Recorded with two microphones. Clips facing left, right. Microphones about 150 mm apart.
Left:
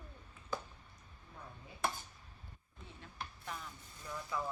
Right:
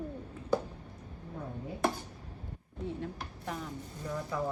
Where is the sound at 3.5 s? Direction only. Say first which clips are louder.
Right 9 dB; 35° right (ahead or behind).